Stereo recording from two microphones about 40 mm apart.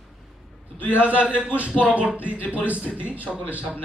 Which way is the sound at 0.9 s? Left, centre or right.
Right.